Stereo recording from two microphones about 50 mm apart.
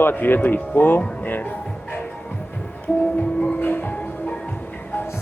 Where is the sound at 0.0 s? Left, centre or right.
Left.